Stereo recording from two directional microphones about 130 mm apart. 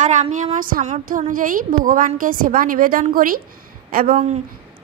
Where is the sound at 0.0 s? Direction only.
70° right (ahead or behind).